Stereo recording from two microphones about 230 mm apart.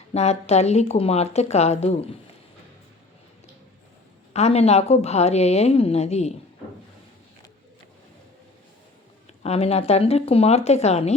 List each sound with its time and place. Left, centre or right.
0.1 s a woman's voice: left
4.4 s a woman's voice: left
9.4 s a woman's voice: left